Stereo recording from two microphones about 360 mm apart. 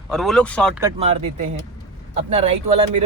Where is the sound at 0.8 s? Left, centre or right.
Centre.